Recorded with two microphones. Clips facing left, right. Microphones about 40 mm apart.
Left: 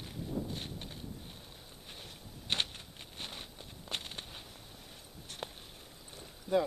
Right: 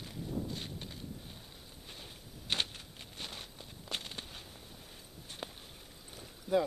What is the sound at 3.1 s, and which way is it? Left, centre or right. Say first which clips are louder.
Walk: even; centre.